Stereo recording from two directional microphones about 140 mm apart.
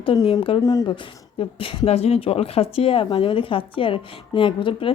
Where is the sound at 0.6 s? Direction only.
25° left (ahead or behind).